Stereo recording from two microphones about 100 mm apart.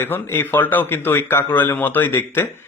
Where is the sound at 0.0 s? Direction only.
20° left (ahead or behind).